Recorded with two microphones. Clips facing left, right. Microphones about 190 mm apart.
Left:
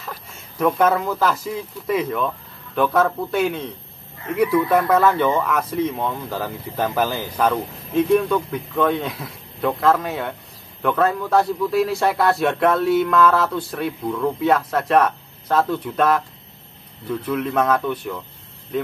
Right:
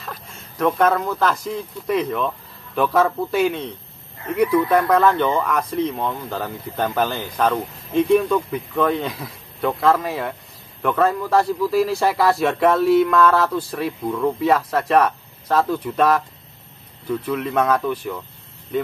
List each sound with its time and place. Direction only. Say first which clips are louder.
0.0 s speech: even; 5° left (ahead or behind)